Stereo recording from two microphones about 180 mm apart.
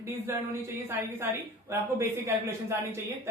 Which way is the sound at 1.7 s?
15° right (ahead or behind).